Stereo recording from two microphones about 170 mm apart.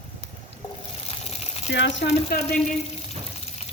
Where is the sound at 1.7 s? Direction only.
90° left.